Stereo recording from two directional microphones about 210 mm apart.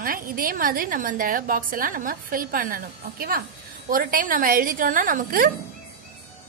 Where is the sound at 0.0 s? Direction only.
45° right (ahead or behind).